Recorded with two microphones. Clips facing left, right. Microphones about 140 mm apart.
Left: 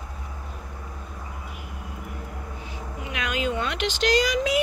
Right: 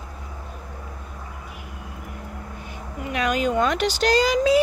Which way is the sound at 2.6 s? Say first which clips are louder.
Right 5 dB; 45° right (ahead or behind).